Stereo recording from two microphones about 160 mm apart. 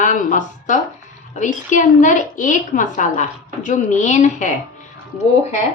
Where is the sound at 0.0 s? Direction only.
55° left (ahead or behind).